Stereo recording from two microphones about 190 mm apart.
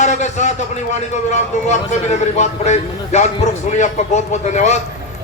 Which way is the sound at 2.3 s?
35° left (ahead or behind).